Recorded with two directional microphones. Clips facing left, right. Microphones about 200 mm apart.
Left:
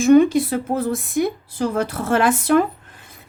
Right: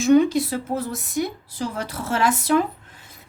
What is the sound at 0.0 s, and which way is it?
Speech, 55° left (ahead or behind).